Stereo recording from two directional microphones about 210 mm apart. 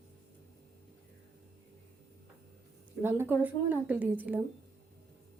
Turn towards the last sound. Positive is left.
turn(degrees=-10)  # may be behind; listen again after turning